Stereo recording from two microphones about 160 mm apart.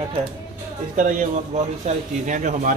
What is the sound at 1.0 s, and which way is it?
Speech, 55° right (ahead or behind).